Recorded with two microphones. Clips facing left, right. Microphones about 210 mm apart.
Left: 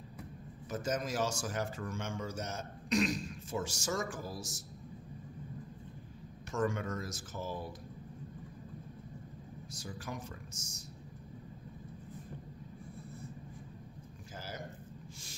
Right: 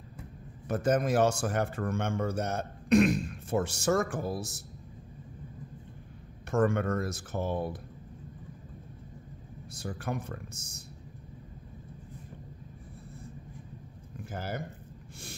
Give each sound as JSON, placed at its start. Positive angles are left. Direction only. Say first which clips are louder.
{"t": 0.7, "sound": "speech", "louder": "right 9 dB", "side_deg": -60}
{"t": 6.5, "sound": "speech", "louder": "right 7 dB", "side_deg": -60}
{"t": 9.8, "sound": "speech", "louder": "right 8 dB", "side_deg": -60}
{"t": 14.3, "sound": "speech", "louder": "right 9 dB", "side_deg": -60}